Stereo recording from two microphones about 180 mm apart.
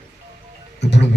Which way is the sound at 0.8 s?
70° left (ahead or behind).